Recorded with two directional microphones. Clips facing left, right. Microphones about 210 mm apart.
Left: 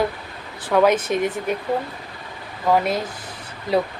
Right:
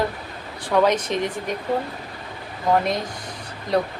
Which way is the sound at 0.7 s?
5° left (ahead or behind).